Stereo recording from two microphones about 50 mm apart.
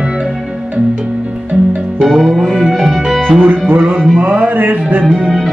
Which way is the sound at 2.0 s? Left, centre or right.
Centre.